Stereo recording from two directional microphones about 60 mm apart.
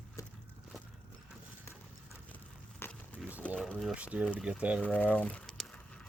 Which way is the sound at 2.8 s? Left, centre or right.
Left.